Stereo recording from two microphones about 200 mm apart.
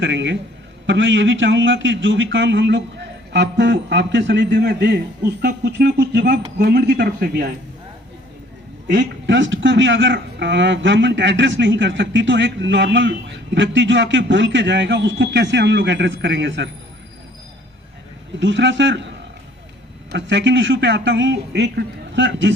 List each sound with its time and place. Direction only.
0.0 s a man's voice: 65° right (ahead or behind)
8.9 s a man's voice: 65° right (ahead or behind)
18.3 s a man's voice: 65° right (ahead or behind)
20.1 s a man's voice: 65° right (ahead or behind)